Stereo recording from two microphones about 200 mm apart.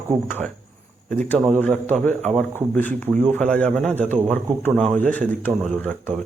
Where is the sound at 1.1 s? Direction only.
5° left (ahead or behind).